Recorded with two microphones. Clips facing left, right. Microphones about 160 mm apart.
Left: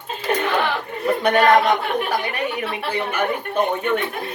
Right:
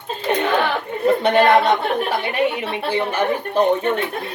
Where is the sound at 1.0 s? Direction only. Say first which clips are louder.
Right 2 dB; 30° right (ahead or behind).